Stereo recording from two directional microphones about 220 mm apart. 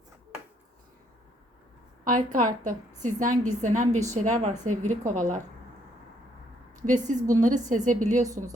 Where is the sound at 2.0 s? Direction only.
35° right (ahead or behind).